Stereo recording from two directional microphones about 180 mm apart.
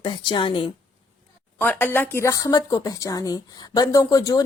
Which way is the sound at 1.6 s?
10° left (ahead or behind).